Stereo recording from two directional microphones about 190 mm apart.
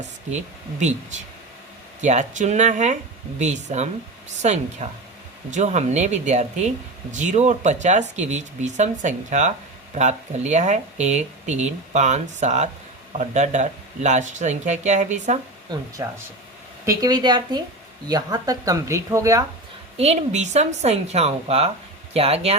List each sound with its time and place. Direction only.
2.0 s speech: 40° right (ahead or behind)
15.7 s speech: 20° right (ahead or behind)
20.0 s speech: 35° right (ahead or behind)